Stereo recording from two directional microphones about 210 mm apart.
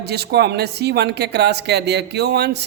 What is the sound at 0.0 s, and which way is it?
Speech, 50° right (ahead or behind).